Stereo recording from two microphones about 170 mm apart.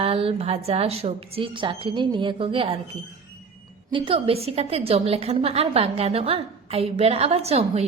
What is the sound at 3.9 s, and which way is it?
A woman's voice, 35° right (ahead or behind).